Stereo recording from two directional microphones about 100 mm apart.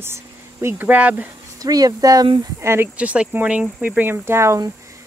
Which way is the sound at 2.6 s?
25° right (ahead or behind).